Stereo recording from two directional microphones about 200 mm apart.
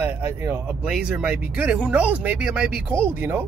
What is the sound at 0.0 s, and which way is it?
Speech, 10° right (ahead or behind).